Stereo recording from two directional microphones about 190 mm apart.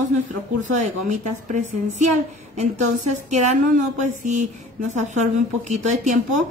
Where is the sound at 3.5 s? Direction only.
40° right (ahead or behind).